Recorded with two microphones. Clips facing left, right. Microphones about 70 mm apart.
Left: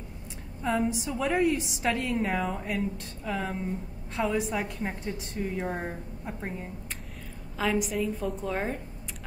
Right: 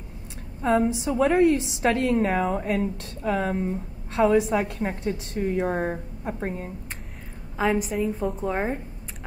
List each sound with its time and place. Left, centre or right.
0.6 s a woman's voice: right
1.2 s a woman's voice: right
7.5 s a woman's voice: right